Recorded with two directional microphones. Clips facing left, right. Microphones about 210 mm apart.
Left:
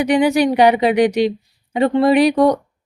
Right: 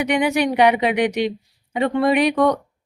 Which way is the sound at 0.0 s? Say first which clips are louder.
Left 5 dB; 35° left (ahead or behind).